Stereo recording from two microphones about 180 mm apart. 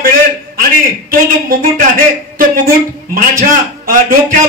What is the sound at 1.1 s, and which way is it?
Speech, 50° right (ahead or behind).